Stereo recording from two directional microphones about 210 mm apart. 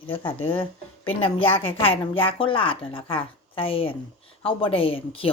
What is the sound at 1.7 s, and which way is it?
A woman's voice, 25° left (ahead or behind).